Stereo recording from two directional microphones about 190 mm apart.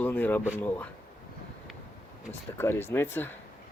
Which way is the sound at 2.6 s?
10° left (ahead or behind).